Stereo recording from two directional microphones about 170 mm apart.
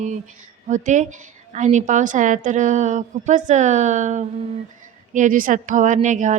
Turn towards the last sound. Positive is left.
turn(degrees=-45)  # may be behind; listen again after turning